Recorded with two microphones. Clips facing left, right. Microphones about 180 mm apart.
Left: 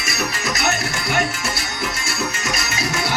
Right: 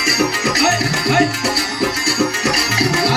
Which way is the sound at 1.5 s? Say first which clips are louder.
Right 8 dB; 35° right (ahead or behind).